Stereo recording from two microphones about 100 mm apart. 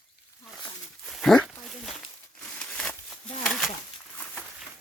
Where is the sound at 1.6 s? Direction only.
Centre (ahead or behind).